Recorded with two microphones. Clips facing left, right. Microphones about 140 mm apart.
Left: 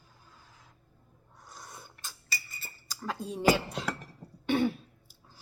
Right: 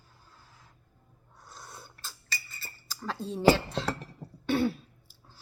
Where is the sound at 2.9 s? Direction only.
10° left (ahead or behind).